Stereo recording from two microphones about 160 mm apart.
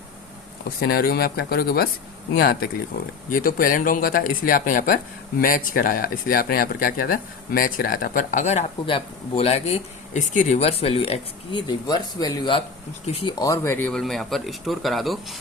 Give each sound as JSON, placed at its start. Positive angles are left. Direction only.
{"t": 0.8, "sound": "speech", "side_deg": 70}
{"t": 8.9, "sound": "a man's voice", "side_deg": 35}
{"t": 13.9, "sound": "speech", "side_deg": 0}